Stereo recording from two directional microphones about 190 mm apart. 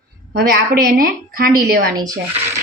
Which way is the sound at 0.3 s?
55° right (ahead or behind).